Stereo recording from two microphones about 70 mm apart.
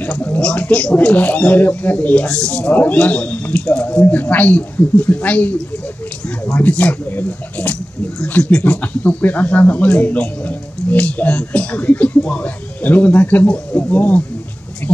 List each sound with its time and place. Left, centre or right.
0.0 s speech: left
2.7 s speech: left